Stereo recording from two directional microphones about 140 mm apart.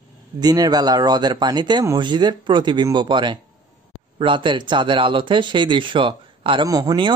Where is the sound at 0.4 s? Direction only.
30° right (ahead or behind).